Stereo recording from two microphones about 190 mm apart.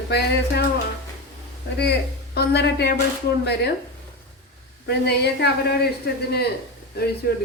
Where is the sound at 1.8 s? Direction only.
60° left (ahead or behind).